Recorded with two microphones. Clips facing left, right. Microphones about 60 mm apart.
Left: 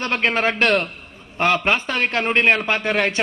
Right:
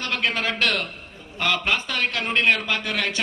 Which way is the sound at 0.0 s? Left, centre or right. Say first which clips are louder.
Left 5 dB; left.